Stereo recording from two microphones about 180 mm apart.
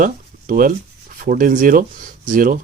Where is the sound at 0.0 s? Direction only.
50° right (ahead or behind).